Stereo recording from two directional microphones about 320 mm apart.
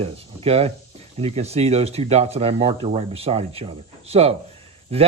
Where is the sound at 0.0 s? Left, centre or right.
Centre.